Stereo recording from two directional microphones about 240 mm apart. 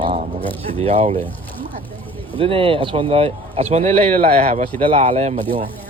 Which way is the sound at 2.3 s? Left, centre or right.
Right.